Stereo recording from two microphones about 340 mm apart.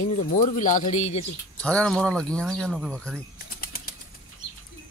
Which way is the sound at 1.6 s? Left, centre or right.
Centre.